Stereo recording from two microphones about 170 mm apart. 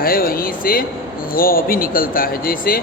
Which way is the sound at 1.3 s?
60° left (ahead or behind).